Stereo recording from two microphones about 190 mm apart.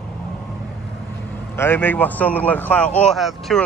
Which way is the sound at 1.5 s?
10° left (ahead or behind).